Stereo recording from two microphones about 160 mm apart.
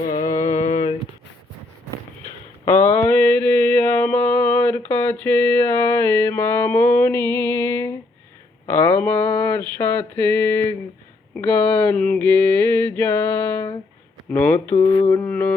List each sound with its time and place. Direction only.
0.3 s mantra: 45° left (ahead or behind)
2.9 s mantra: 15° left (ahead or behind)
11.3 s a sound: 10° left (ahead or behind)
14.3 s speech: 10° left (ahead or behind)
14.8 s mantra: 40° left (ahead or behind)
15.1 s a sound: 10° left (ahead or behind)